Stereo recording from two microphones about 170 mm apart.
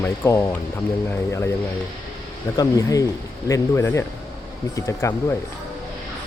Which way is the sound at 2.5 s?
20° left (ahead or behind).